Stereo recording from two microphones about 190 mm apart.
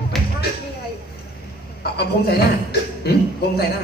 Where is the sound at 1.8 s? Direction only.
55° left (ahead or behind).